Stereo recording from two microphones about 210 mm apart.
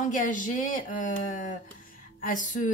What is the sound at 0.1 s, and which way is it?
A woman's voice, 40° left (ahead or behind).